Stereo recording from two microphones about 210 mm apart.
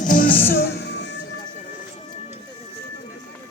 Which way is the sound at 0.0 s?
40° left (ahead or behind).